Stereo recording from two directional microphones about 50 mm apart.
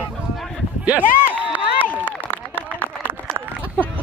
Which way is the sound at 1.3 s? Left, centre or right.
Right.